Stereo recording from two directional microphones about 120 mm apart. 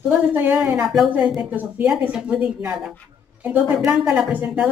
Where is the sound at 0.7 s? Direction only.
5° right (ahead or behind).